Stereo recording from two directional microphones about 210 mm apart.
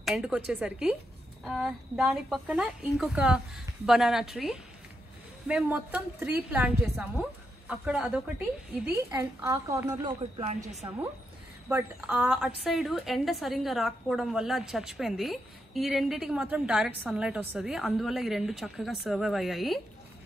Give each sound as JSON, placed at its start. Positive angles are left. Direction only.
{"t": 0.0, "sound": "a woman's voice", "side_deg": -5}
{"t": 9.1, "sound": "a woman's voice", "side_deg": -15}
{"t": 11.7, "sound": "a woman's voice", "side_deg": -10}